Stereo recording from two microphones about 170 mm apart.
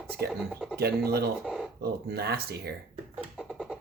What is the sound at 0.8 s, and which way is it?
Speech, 70° right (ahead or behind).